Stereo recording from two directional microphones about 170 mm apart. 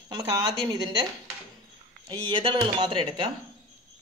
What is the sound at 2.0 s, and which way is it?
Speech, 30° right (ahead or behind).